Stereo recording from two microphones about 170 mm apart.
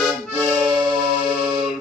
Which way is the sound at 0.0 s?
5° right (ahead or behind).